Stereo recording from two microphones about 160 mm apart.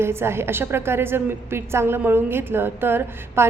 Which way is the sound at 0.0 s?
15° right (ahead or behind).